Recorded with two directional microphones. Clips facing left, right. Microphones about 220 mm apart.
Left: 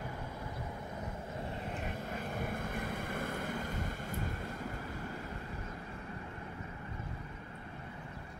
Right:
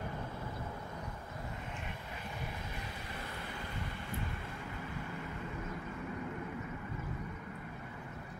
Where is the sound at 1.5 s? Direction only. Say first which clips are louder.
Left 5 dB; 40° left (ahead or behind).